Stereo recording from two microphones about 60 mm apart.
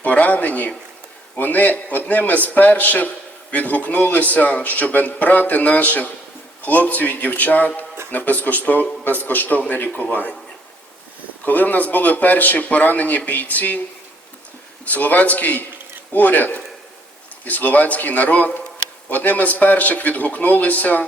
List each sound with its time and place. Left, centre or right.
0.0 s a man's voice: left
11.4 s a man's voice: left
14.8 s a man's voice: left